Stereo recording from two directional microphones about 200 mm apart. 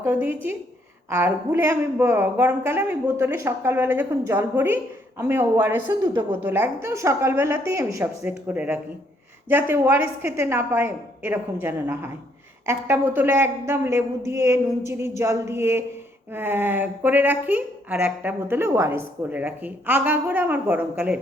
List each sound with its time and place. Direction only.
0.0 s speech: 10° right (ahead or behind)